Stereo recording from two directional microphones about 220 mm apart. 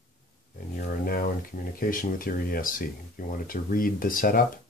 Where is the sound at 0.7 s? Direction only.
40° left (ahead or behind).